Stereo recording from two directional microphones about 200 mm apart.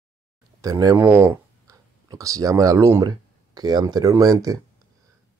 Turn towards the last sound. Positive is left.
turn(degrees=-15)  # may be behind; listen again after turning